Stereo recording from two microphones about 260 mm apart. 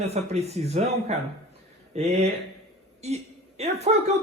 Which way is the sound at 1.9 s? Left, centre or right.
Right.